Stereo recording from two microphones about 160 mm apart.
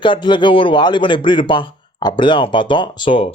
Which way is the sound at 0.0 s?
30° left (ahead or behind).